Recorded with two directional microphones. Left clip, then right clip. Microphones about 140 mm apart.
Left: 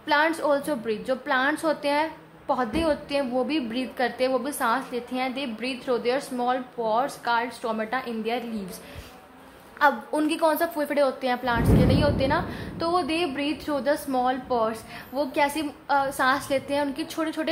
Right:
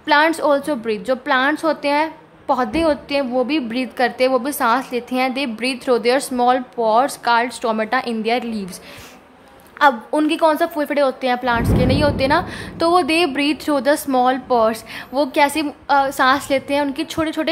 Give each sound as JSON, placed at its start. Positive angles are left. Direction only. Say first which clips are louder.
{"t": 0.0, "sound": "a woman's voice", "louder": "right 8 dB", "side_deg": -35}
{"t": 9.8, "sound": "a woman's voice", "louder": "right 7 dB", "side_deg": -30}